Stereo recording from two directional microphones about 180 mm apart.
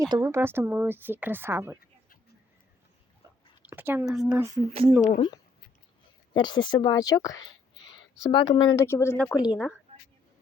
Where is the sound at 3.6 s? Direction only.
10° right (ahead or behind).